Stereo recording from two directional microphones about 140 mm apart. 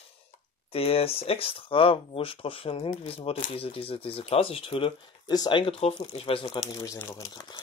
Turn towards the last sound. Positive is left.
turn(degrees=25)  # may be behind; listen again after turning